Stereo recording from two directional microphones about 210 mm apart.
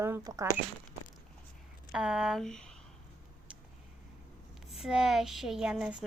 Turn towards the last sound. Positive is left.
turn(degrees=-5)  # may be behind; listen again after turning